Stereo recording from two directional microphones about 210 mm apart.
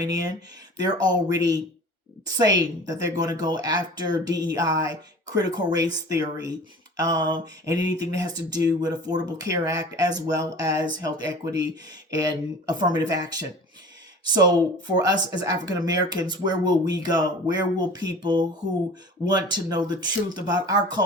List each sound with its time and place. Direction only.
0.8 s speech: 20° right (ahead or behind)